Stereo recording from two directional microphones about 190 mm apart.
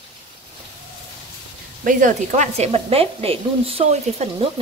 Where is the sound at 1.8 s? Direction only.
40° right (ahead or behind).